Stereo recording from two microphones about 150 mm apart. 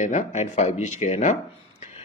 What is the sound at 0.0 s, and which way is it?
Speech, 55° left (ahead or behind).